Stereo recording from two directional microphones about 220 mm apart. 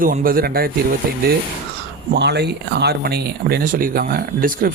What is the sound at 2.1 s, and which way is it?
A man's voice, 50° right (ahead or behind).